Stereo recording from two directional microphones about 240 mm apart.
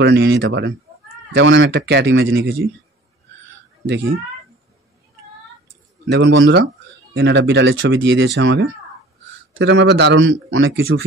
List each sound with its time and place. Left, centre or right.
0.0 s a man's voice: right
3.8 s a man's voice: right
6.0 s a man's voice: right